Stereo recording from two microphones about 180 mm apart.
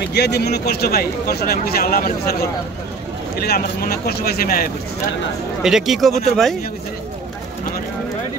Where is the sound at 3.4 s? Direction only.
60° left (ahead or behind).